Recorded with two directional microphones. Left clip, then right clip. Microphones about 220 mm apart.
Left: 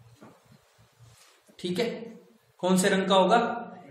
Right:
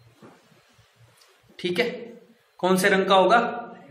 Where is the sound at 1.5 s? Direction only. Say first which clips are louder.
Right 5 dB; centre (ahead or behind).